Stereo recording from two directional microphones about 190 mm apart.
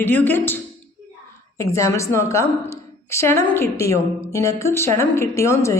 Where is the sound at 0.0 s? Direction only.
10° left (ahead or behind).